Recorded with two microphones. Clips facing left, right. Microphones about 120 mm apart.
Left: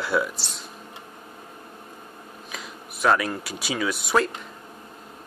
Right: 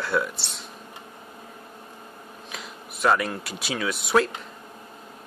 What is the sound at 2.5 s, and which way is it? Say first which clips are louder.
Speech: left 1 dB; centre (ahead or behind).